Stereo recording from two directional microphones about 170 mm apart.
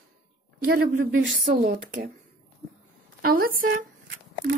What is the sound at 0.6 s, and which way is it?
A woman's voice, 75° right (ahead or behind).